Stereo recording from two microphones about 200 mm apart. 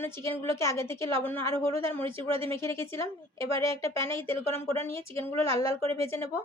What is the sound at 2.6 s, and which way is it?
A woman's voice, 15° left (ahead or behind).